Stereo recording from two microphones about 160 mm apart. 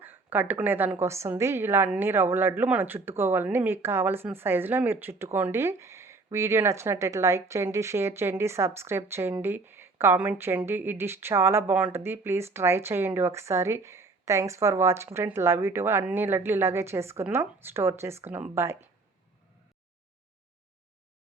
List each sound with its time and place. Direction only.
0.0 s a woman's voice: 10° right (ahead or behind)